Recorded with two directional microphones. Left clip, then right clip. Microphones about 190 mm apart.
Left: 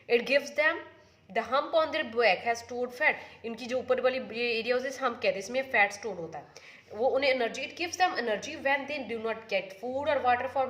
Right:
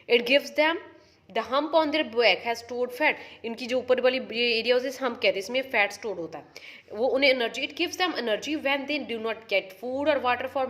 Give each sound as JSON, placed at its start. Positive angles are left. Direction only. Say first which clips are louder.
{"t": 0.1, "sound": "a woman's voice", "louder": "right 4 dB", "side_deg": -35}